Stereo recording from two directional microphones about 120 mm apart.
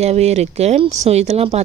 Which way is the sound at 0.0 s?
65° right (ahead or behind).